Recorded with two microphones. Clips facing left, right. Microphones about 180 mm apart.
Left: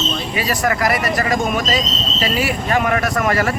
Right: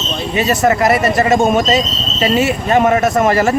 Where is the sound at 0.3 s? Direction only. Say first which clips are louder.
Right 7 dB; 25° right (ahead or behind).